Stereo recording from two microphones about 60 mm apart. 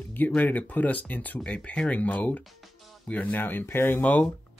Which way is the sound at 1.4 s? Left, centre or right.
Centre.